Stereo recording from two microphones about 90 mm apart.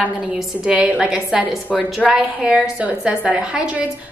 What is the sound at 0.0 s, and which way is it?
A woman's voice, 10° right (ahead or behind).